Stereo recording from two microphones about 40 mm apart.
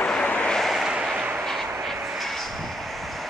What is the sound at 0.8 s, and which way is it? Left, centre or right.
Vehicle, centre.